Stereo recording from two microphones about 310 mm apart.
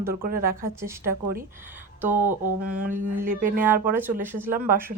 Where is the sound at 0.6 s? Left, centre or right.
Centre.